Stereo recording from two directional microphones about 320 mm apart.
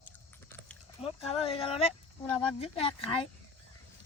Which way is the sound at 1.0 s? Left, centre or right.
Centre.